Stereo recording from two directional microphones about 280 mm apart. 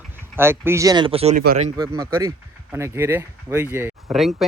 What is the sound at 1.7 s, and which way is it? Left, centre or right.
Speech, centre.